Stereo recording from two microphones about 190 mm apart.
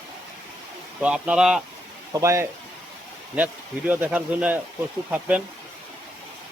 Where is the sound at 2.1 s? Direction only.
15° right (ahead or behind).